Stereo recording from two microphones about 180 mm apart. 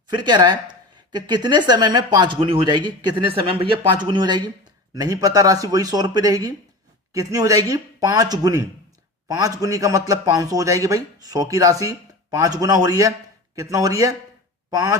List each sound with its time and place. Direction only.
0.1 s speech: 25° right (ahead or behind)